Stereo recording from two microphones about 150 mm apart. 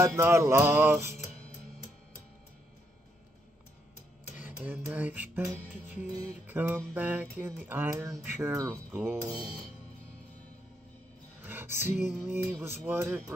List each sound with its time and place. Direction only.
0.0 s music: 20° right (ahead or behind)
4.4 s music: 10° right (ahead or behind)
11.4 s a sound: 15° right (ahead or behind)
12.2 s music: 15° right (ahead or behind)